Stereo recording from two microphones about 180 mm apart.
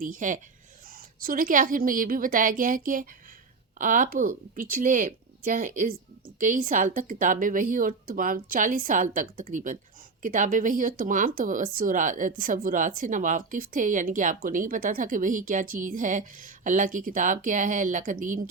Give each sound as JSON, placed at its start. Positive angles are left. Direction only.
{"t": 0.0, "sound": "speech", "side_deg": -45}